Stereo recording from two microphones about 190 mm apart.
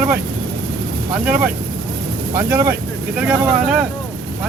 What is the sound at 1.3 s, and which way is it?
Speech, 10° right (ahead or behind).